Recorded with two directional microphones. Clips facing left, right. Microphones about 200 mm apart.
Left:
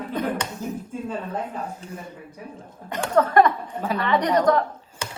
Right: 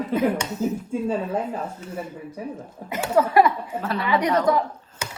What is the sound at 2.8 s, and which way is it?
Speech, 5° right (ahead or behind).